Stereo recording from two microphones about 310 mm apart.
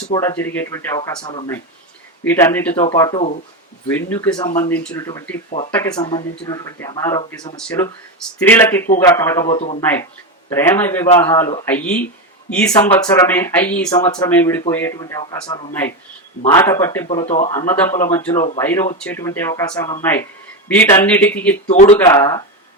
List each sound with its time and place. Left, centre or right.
0.1 s speech: centre
10.5 s speech: centre
17.7 s speech: centre
21.7 s speech: left
21.9 s speech: centre